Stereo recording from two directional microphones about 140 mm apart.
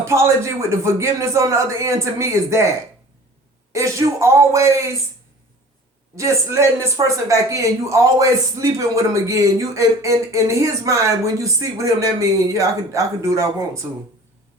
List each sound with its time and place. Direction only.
0.0 s speech: 20° right (ahead or behind)
3.7 s speech: 20° right (ahead or behind)
6.1 s speech: 20° right (ahead or behind)